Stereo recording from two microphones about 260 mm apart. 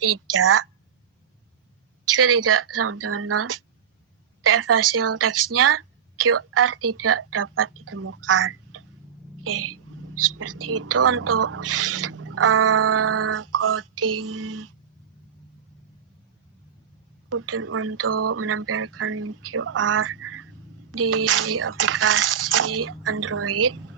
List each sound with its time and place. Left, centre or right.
0.0 s a woman's voice: right
2.1 s a woman's voice: right
17.2 s a woman's voice: right